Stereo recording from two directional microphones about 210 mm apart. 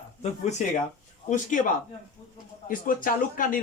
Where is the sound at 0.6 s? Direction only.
35° left (ahead or behind).